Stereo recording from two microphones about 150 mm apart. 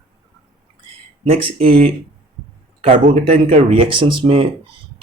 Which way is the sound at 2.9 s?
55° right (ahead or behind).